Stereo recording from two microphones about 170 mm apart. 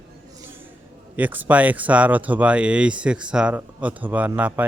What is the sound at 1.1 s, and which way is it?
A man's voice, 10° right (ahead or behind).